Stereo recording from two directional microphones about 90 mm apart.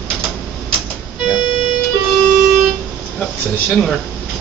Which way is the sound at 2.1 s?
5° left (ahead or behind).